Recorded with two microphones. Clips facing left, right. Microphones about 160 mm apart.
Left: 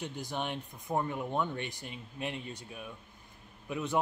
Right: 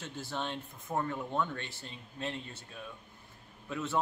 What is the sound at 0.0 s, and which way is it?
A man's voice, 15° left (ahead or behind).